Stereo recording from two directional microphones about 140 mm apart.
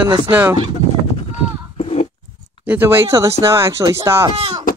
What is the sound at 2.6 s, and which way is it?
Speech, 15° right (ahead or behind).